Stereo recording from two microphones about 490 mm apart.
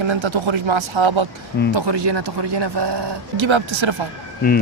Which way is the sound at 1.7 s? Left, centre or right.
Right.